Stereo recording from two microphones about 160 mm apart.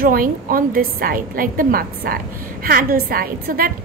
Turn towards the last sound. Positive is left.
turn(degrees=-65)  # may be behind; listen again after turning